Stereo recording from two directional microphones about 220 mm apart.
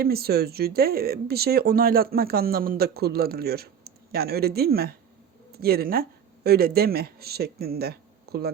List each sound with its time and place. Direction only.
0.0 s speech: 45° right (ahead or behind)